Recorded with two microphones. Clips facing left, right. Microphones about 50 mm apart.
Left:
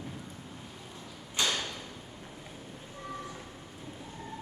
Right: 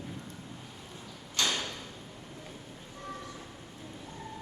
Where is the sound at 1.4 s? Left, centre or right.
Centre.